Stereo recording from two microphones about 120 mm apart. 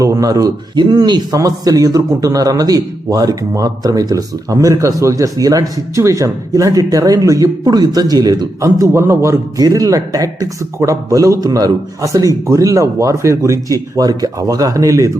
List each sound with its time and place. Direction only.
0.0 s a man's voice: 30° right (ahead or behind)